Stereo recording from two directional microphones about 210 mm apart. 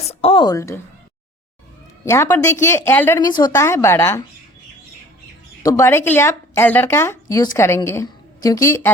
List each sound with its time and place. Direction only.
0.1 s a woman's voice: 30° left (ahead or behind)
2.0 s speech: 10° left (ahead or behind)
5.6 s speech: 15° left (ahead or behind)